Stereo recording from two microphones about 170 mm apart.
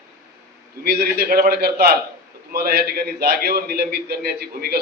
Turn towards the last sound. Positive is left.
turn(degrees=-65)  # may be behind; listen again after turning